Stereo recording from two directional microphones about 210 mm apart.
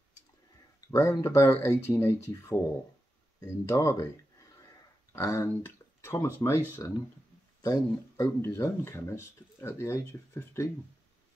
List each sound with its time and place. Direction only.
0.7 s speech: 15° left (ahead or behind)
5.1 s speech: 15° left (ahead or behind)